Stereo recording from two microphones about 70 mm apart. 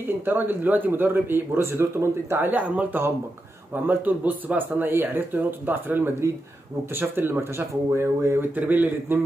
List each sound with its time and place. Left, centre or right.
0.0 s speech: right
8.5 s speech: right